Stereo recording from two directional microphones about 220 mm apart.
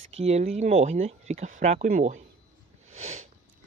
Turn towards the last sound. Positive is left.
turn(degrees=-30)  # may be behind; listen again after turning